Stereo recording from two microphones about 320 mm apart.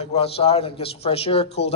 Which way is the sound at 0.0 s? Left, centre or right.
Centre.